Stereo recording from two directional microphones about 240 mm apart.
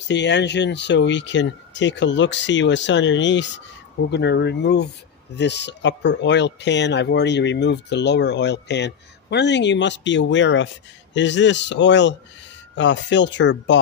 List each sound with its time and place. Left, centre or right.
0.1 s speech: left